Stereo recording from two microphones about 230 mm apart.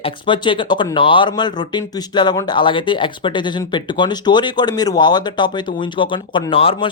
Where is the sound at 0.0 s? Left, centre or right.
Left.